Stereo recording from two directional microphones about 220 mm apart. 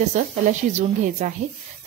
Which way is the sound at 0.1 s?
35° right (ahead or behind).